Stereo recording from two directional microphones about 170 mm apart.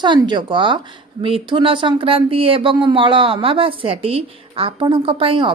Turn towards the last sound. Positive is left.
turn(degrees=-30)  # may be behind; listen again after turning